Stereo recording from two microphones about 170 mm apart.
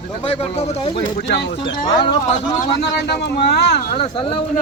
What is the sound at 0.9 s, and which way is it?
Speech, 80° left.